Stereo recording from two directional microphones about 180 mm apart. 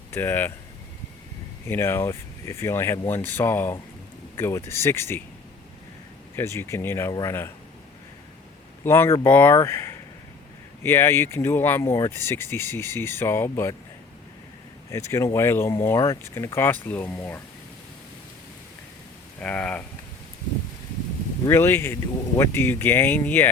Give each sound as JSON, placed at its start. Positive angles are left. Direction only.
{"t": 0.1, "sound": "speech", "side_deg": 10}
{"t": 1.6, "sound": "speech", "side_deg": 15}
{"t": 6.3, "sound": "speech", "side_deg": 15}
{"t": 8.8, "sound": "speech", "side_deg": 15}
{"t": 14.8, "sound": "speech", "side_deg": 15}
{"t": 19.4, "sound": "speech", "side_deg": 5}
{"t": 21.4, "sound": "speech", "side_deg": 15}